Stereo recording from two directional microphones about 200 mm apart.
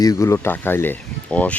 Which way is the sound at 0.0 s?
15° left (ahead or behind).